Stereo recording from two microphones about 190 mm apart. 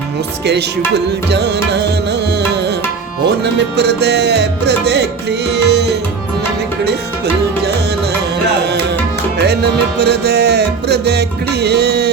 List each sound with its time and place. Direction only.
0.9 s music: 60° right (ahead or behind)
3.4 s music: 60° right (ahead or behind)
9.4 s music: 60° right (ahead or behind)